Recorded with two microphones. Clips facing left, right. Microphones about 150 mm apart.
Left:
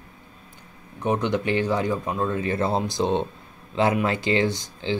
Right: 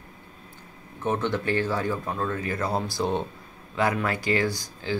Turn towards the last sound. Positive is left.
turn(degrees=25)  # may be behind; listen again after turning